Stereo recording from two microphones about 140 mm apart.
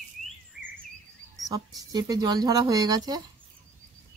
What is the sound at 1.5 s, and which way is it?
Speech, 25° right (ahead or behind).